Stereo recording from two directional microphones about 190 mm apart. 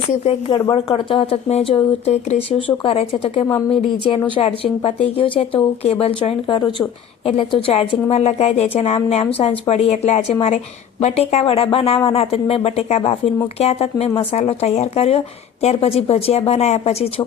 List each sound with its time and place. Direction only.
0.1 s speech: 35° left (ahead or behind)